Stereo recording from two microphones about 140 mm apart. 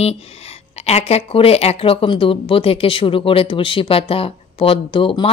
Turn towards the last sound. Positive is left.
turn(degrees=40)  # may be behind; listen again after turning